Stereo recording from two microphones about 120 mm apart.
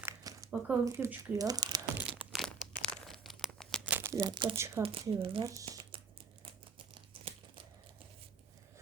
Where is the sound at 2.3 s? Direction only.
Centre (ahead or behind).